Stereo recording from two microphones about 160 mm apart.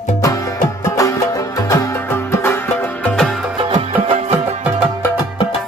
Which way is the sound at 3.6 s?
35° right (ahead or behind).